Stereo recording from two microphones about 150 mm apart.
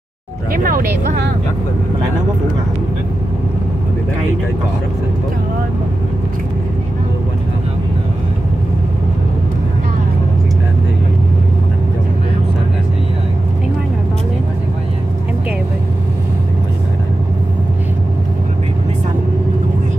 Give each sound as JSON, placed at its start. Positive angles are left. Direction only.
{"t": 0.5, "sound": "speech", "side_deg": -75}